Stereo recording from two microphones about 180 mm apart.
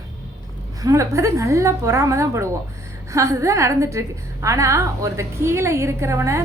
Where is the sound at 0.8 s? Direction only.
15° right (ahead or behind).